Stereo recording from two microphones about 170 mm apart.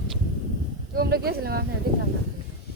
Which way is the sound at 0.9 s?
65° right (ahead or behind).